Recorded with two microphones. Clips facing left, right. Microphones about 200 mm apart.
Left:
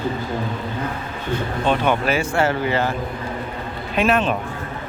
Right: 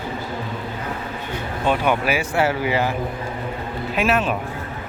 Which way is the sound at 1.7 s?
10° right (ahead or behind).